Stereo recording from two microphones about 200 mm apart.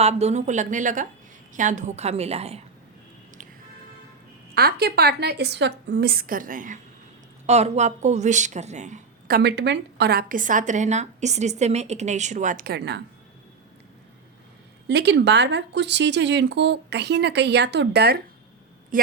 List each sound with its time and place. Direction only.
0.0 s speech: 35° right (ahead or behind)
4.5 s a woman's voice: 50° right (ahead or behind)
14.8 s speech: 55° right (ahead or behind)